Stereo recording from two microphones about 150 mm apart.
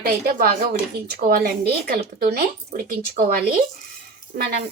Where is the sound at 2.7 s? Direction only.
65° right (ahead or behind).